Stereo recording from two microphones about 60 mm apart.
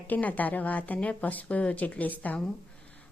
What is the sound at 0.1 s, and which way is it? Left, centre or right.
Speech, left.